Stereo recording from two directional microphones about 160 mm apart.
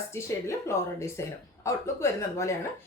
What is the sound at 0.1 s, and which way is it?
A woman's voice, 15° left (ahead or behind).